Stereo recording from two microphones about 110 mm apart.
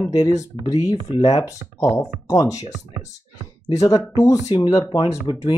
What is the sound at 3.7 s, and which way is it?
Speech, 30° left (ahead or behind).